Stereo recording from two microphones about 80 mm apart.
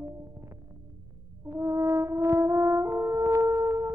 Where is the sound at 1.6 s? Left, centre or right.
Right.